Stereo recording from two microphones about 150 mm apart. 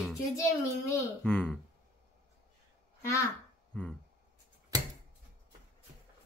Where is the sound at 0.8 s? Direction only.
20° left (ahead or behind).